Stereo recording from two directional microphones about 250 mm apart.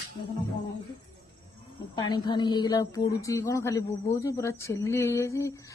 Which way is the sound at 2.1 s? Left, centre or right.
Centre.